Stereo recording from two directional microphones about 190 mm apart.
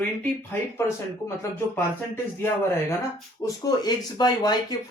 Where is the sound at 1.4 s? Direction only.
10° left (ahead or behind).